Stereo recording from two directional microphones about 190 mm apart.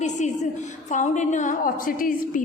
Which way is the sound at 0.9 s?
40° left (ahead or behind).